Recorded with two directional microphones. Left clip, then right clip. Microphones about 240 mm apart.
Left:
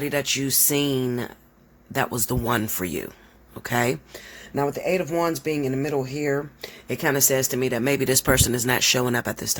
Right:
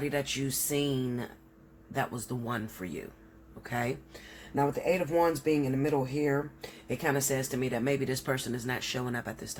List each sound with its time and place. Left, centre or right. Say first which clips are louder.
0.0 s speech: left 8 dB; left